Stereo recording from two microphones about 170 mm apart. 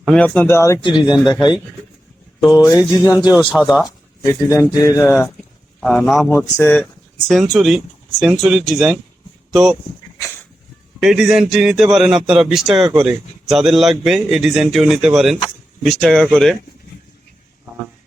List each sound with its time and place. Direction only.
0.0 s speech: centre (ahead or behind)
0.3 s speech: 15° left (ahead or behind)
2.4 s speech: centre (ahead or behind)
2.9 s speech: 20° left (ahead or behind)
3.5 s a man's voice: 5° right (ahead or behind)
3.8 s speech: 20° left (ahead or behind)
5.8 s a man's voice: centre (ahead or behind)
6.3 s speech: 10° left (ahead or behind)
7.3 s a man's voice: centre (ahead or behind)
11.0 s a man's voice: centre (ahead or behind)